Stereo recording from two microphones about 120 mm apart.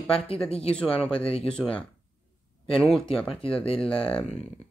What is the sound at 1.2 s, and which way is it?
Speech, 50° left (ahead or behind).